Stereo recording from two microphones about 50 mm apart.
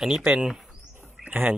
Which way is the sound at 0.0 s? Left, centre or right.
Centre.